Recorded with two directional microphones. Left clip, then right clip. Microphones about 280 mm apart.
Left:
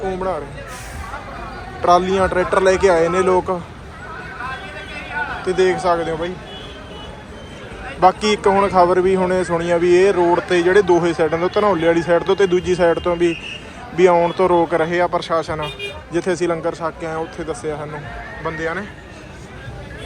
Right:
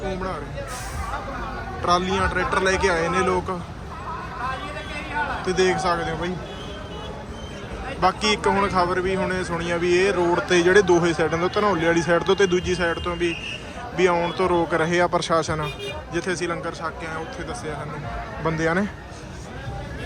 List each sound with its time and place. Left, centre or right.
0.1 s music: centre
1.8 s a man's voice: centre
4.4 s a sound: right
5.5 s a man's voice: centre
8.0 s a man's voice: centre
18.4 s a man's voice: centre